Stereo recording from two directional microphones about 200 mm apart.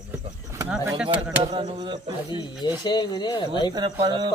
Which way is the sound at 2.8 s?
20° left (ahead or behind).